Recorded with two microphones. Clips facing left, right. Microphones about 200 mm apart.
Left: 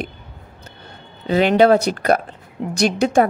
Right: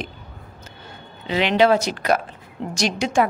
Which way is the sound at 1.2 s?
45° left (ahead or behind).